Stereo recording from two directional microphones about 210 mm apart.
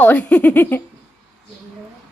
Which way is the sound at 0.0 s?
5° left (ahead or behind).